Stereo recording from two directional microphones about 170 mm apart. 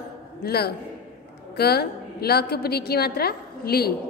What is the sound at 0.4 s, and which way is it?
A woman's voice, 70° left (ahead or behind).